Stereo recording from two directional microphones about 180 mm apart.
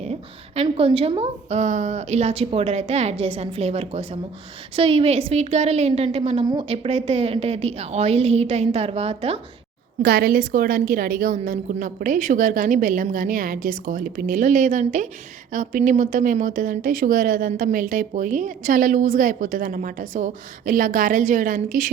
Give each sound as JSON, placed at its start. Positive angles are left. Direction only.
{"t": 0.0, "sound": "a woman's voice", "side_deg": -35}
{"t": 10.0, "sound": "a woman's voice", "side_deg": -60}